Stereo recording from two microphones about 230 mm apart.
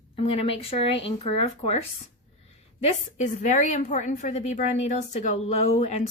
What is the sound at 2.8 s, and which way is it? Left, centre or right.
A woman's voice, left.